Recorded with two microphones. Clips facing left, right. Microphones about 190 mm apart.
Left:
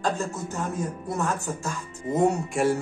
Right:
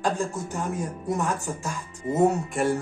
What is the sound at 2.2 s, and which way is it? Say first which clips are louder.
Speech: even; centre (ahead or behind).